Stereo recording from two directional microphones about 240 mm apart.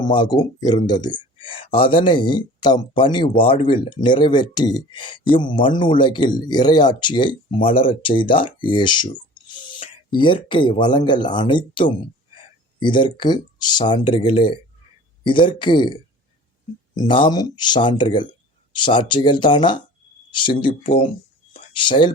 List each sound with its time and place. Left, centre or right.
0.0 s speech: centre